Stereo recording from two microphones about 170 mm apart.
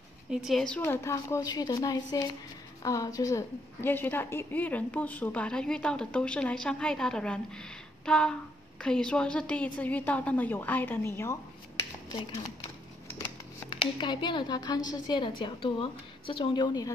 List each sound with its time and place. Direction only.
0.3 s a woman's voice: centre (ahead or behind); by 11.3 s 15° left (ahead or behind)
13.7 s a woman's voice: 30° left (ahead or behind)